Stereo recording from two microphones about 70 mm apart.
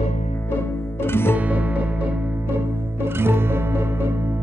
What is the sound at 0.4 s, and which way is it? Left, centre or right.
Music, left.